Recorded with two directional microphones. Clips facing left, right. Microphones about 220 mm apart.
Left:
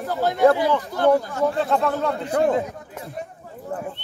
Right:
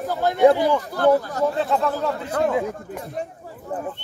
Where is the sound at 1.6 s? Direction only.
Centre (ahead or behind).